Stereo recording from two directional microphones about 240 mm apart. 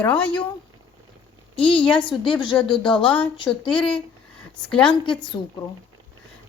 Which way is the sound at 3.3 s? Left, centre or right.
Centre.